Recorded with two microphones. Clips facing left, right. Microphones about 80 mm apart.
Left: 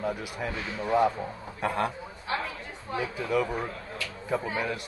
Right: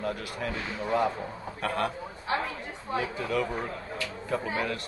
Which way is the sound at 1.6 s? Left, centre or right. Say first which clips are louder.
Left 1 dB; centre.